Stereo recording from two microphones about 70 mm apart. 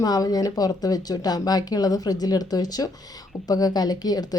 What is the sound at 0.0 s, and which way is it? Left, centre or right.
Speech, left.